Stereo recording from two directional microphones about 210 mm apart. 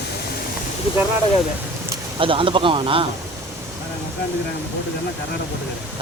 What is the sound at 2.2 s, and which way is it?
Speech, 25° right (ahead or behind).